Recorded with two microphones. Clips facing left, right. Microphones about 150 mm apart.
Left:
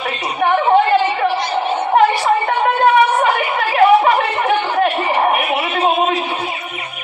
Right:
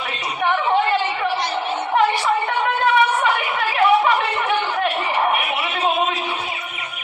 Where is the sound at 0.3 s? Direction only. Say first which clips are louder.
Left 6 dB; 50° left (ahead or behind).